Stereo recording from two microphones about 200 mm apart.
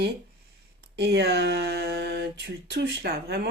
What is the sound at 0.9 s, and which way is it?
Speech, 55° right (ahead or behind).